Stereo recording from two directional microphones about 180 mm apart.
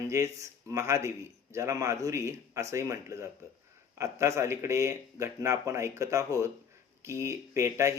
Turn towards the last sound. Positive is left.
turn(degrees=-15)  # may be behind; listen again after turning